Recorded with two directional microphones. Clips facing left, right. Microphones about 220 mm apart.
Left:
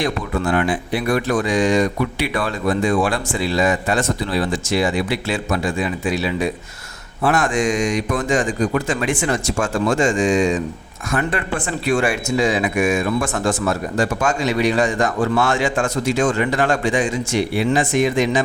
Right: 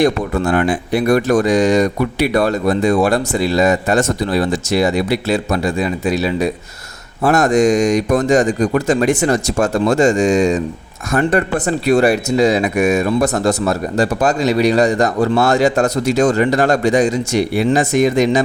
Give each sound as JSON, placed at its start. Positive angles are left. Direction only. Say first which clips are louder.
{"t": 0.0, "sound": "speech", "louder": "right 6 dB", "side_deg": -45}